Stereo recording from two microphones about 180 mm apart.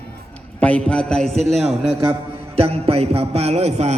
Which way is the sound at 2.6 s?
35° right (ahead or behind).